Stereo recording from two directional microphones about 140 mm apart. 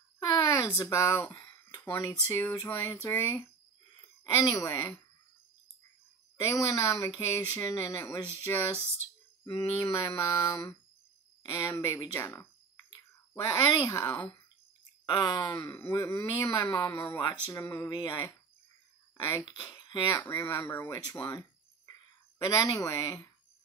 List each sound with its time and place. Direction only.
0.2 s a sound: 25° left (ahead or behind)
4.2 s speech: 20° left (ahead or behind)
6.4 s speech: 25° left (ahead or behind)
13.3 s speech: 20° left (ahead or behind)
15.0 s speech: 30° left (ahead or behind)
15.5 s a sound: 15° left (ahead or behind)
15.9 s speech: 25° left (ahead or behind)
16.9 s a sound: 15° left (ahead or behind)
17.5 s speech: 20° left (ahead or behind)
19.4 s speech: 35° left (ahead or behind)
20.1 s a sound: 20° left (ahead or behind)
22.4 s speech: 20° left (ahead or behind)